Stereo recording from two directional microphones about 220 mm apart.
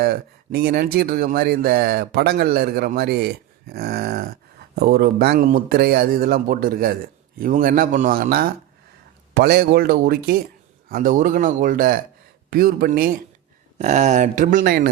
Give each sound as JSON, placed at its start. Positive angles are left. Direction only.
{"t": 0.0, "sound": "speech", "side_deg": -45}
{"t": 13.7, "sound": "speech", "side_deg": -30}